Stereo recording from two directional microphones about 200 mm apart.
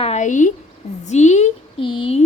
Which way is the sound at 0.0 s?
35° left (ahead or behind).